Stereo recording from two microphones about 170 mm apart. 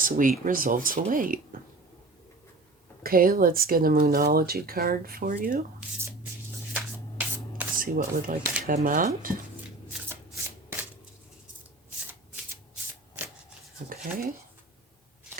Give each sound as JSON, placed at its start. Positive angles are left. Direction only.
{"t": 0.0, "sound": "speech", "side_deg": -50}
{"t": 3.0, "sound": "speech", "side_deg": -60}
{"t": 6.7, "sound": "rub", "side_deg": -10}
{"t": 7.8, "sound": "speech", "side_deg": -55}
{"t": 13.9, "sound": "speech", "side_deg": -55}